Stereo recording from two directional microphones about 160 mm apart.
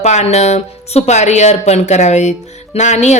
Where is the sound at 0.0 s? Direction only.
45° left (ahead or behind).